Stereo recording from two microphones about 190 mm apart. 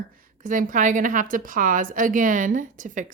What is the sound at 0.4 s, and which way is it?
A woman's voice, 45° right (ahead or behind).